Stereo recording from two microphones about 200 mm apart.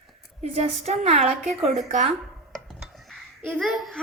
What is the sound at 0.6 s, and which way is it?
A woman's voice, 30° right (ahead or behind).